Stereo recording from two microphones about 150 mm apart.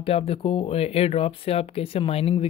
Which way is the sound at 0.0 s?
40° left (ahead or behind).